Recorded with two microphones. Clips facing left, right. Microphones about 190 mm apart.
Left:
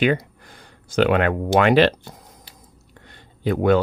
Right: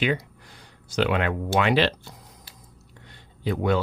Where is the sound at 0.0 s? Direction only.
50° left (ahead or behind).